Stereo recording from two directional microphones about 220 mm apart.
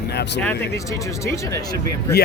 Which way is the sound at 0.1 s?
45° left (ahead or behind).